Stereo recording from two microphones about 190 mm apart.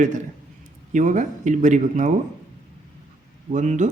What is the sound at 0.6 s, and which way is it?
A man's voice, 40° right (ahead or behind).